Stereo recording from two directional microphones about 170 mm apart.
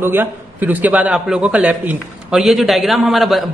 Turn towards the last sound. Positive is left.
turn(degrees=0)  # may be behind; listen again after turning